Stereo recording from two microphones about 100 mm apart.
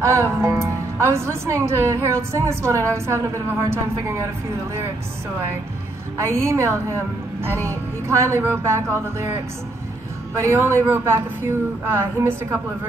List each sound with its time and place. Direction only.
0.0 s a woman's voice: 30° right (ahead or behind)
6.1 s a woman's voice: 30° right (ahead or behind)
10.4 s a woman's voice: 25° right (ahead or behind)